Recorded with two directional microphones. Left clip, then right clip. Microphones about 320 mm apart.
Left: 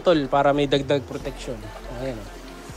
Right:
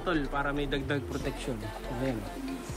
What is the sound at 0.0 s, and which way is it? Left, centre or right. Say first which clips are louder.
Speech: left 12 dB; centre.